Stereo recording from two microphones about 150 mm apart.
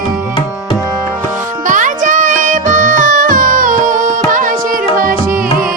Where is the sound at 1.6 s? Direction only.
60° right (ahead or behind).